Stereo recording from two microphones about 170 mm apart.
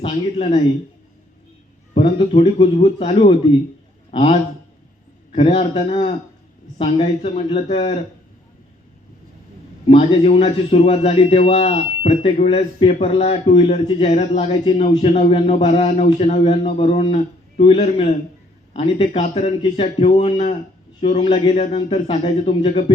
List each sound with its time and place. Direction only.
0.1 s a man's voice: 40° left (ahead or behind)
2.0 s a man's voice: 35° left (ahead or behind)
9.9 s a man's voice: 35° left (ahead or behind)